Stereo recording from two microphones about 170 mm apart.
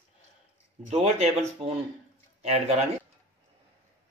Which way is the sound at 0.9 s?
35° right (ahead or behind).